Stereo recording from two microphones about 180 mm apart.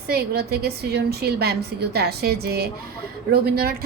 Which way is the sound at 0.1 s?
60° right (ahead or behind).